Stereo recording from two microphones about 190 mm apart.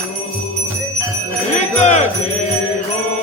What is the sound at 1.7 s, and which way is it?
Jingle bell, 35° left (ahead or behind).